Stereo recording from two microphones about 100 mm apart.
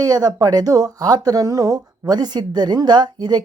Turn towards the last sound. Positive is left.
turn(degrees=-45)  # may be behind; listen again after turning